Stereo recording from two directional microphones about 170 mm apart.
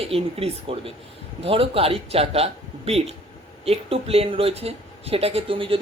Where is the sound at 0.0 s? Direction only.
35° right (ahead or behind).